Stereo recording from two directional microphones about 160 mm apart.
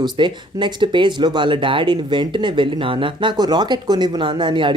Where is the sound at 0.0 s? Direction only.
30° right (ahead or behind).